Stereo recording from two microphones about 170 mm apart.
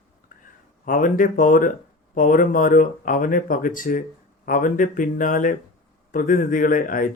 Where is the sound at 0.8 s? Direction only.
50° left (ahead or behind).